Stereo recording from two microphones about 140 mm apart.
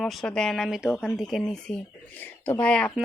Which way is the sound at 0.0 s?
Centre (ahead or behind).